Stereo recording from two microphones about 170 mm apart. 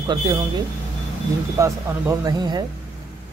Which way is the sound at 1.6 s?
20° right (ahead or behind).